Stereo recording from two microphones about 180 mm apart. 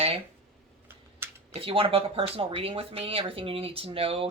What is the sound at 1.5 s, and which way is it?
Speech, 30° right (ahead or behind).